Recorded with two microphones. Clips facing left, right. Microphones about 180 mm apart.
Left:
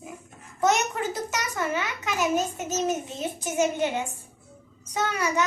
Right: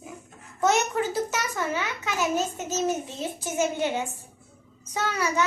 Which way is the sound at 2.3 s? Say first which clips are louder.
Left 1 dB; 20° left (ahead or behind).